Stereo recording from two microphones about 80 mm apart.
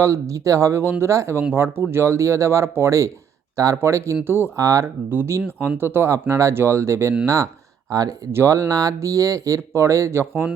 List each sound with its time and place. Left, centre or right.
0.0 s speech: right
4.5 s speech: right
5.1 s speech: right
7.9 s speech: right
8.3 s speech: right